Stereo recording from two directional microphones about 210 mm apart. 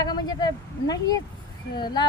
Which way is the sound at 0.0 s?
20° left (ahead or behind).